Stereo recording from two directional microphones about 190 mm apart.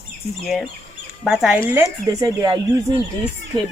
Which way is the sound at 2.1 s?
20° right (ahead or behind).